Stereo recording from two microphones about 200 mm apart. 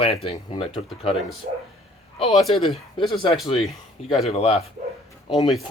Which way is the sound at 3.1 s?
25° left (ahead or behind).